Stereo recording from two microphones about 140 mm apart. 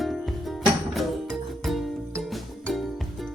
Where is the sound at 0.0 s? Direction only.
Centre (ahead or behind).